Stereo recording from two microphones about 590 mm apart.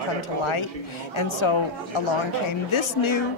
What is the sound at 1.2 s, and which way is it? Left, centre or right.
A woman's voice, left.